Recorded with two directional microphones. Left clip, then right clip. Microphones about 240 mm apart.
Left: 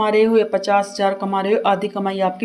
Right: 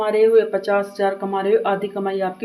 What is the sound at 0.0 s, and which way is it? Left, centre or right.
Speech, left.